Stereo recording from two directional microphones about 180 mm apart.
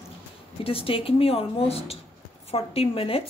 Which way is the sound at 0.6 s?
30° left (ahead or behind).